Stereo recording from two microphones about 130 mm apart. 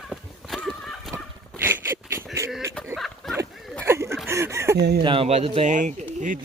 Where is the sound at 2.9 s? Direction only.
Centre (ahead or behind).